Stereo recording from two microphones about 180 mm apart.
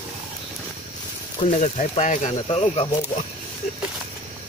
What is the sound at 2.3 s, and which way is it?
Speech, 30° left (ahead or behind).